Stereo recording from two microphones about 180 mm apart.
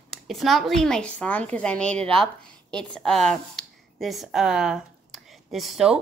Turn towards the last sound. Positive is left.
turn(degrees=-5)  # may be behind; listen again after turning